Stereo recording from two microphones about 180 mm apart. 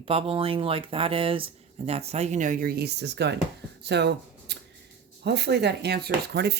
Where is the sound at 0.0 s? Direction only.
35° right (ahead or behind).